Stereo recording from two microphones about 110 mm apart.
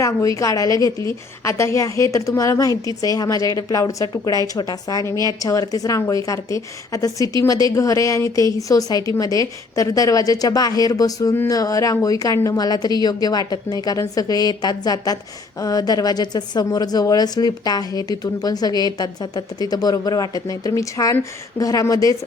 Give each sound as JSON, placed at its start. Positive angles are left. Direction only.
{"t": 0.0, "sound": "a woman's voice", "side_deg": 30}